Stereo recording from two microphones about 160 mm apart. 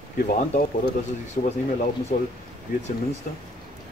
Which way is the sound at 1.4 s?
50° left (ahead or behind).